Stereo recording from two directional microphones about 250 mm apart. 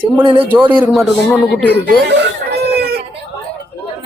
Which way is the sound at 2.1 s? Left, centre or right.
Right.